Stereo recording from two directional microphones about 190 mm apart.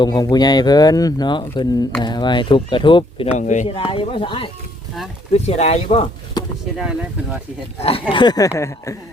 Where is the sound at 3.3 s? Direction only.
40° left (ahead or behind).